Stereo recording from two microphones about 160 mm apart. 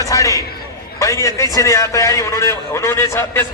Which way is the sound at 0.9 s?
20° left (ahead or behind).